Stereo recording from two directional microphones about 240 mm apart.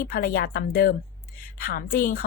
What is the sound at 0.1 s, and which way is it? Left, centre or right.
A woman's voice, left.